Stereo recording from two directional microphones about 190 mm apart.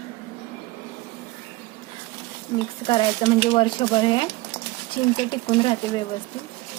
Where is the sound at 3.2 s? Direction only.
30° left (ahead or behind).